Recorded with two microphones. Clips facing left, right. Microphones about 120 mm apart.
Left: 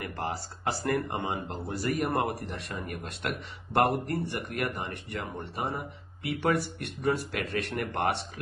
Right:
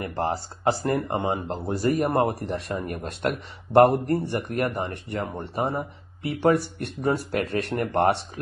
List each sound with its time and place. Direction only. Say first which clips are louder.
0.0 s a man's voice: right 7 dB; 25° right (ahead or behind)